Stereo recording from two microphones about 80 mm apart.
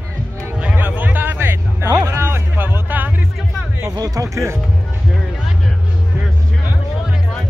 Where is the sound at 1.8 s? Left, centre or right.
Right.